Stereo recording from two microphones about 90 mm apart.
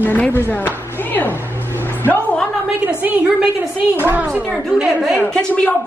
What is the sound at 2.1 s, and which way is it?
Speech, 15° left (ahead or behind).